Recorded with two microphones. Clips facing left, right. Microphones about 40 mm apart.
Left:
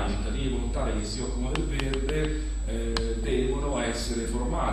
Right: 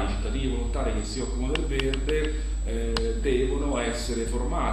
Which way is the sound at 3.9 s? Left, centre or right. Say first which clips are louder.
Right 1 dB; right.